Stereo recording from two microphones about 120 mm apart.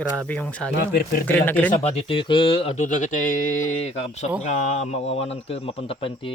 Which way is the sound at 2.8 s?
90° left.